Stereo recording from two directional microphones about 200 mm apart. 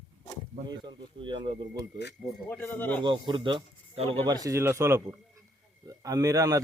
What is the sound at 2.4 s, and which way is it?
Speech, 10° left (ahead or behind).